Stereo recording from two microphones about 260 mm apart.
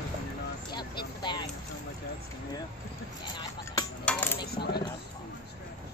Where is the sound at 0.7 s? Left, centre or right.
Centre.